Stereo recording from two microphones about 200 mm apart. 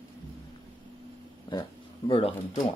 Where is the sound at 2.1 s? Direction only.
25° left (ahead or behind).